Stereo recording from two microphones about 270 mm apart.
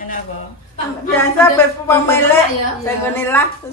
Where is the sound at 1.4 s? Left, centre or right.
Centre.